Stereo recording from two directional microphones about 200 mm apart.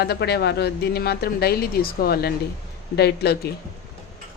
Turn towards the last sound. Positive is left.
turn(degrees=55)  # may be behind; listen again after turning